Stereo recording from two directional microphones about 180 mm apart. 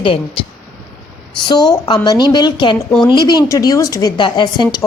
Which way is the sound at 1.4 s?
25° left (ahead or behind).